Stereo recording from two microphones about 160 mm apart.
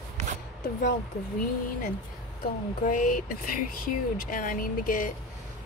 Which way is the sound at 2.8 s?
55° left (ahead or behind).